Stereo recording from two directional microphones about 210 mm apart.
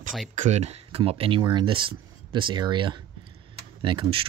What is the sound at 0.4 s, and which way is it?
Speech, 30° right (ahead or behind).